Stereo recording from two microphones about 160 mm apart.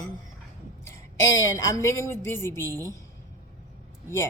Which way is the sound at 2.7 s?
20° right (ahead or behind).